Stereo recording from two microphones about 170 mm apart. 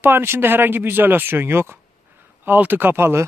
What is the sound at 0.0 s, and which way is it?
Speech, 15° right (ahead or behind).